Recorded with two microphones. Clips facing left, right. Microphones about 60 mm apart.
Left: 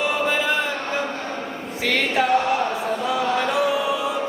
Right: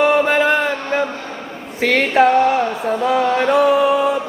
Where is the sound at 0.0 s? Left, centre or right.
Right.